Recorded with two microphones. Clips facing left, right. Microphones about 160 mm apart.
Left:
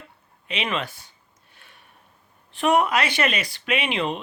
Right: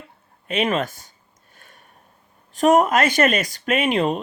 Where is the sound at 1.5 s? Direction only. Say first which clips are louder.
Right 3 dB; 45° right (ahead or behind).